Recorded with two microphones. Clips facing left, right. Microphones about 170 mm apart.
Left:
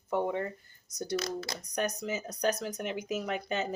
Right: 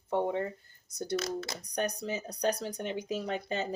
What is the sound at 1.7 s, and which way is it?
Speech, 30° right (ahead or behind).